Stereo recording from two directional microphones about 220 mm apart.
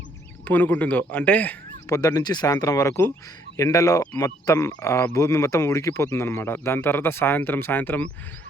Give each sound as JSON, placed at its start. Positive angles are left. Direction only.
{"t": 0.4, "sound": "speech", "side_deg": 10}